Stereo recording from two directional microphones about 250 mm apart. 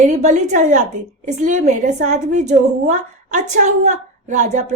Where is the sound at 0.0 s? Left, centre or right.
Right.